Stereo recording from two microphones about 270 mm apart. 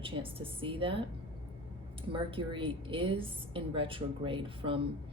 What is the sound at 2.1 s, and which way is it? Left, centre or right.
Speech, centre.